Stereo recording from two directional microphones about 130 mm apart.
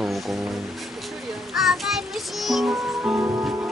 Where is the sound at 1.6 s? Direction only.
Centre (ahead or behind).